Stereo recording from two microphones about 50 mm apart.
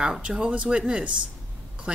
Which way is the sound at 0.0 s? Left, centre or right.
Centre.